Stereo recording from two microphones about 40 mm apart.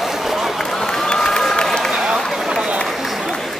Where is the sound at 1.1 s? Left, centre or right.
Centre.